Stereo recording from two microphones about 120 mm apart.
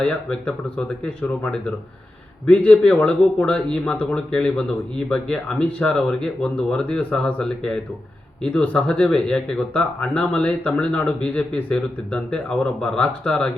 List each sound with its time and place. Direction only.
0.0 s a man's voice: 10° left (ahead or behind)